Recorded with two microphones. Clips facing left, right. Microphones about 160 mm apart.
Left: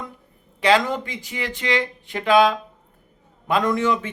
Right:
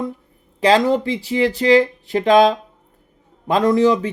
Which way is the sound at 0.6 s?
35° right (ahead or behind).